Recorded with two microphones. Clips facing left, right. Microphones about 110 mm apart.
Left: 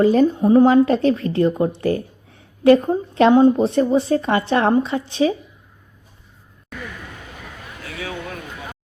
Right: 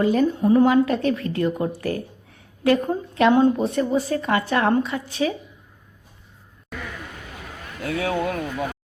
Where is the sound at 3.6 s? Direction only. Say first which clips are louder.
Left 5 dB; 30° left (ahead or behind).